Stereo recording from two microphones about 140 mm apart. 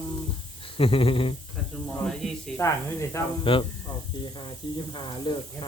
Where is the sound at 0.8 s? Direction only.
40° left (ahead or behind).